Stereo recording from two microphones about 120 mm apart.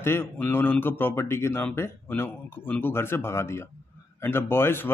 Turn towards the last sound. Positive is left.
turn(degrees=20)  # may be behind; listen again after turning